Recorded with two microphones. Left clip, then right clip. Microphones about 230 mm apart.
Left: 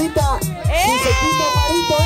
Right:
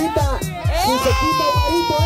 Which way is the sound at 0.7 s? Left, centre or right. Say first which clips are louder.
Left 2 dB; centre.